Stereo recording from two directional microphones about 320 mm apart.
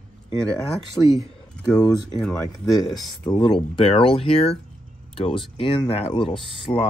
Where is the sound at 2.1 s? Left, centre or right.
Centre.